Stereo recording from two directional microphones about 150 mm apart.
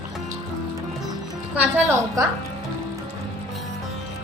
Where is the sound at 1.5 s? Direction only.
10° right (ahead or behind).